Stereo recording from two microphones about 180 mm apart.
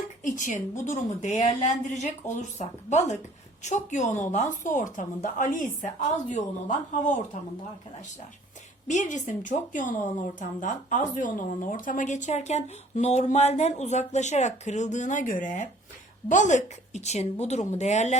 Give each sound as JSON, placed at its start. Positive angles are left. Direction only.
{"t": 0.2, "sound": "a woman's voice", "side_deg": 45}
{"t": 8.9, "sound": "a woman's voice", "side_deg": 40}